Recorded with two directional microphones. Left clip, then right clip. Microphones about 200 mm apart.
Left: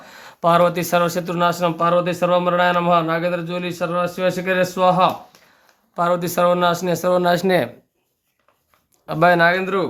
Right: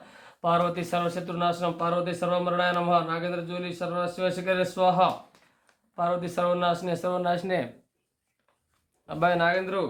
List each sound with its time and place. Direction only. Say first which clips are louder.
0.0 s speech: left 10 dB; 45° left (ahead or behind)
9.0 s speech: left 9 dB; 50° left (ahead or behind)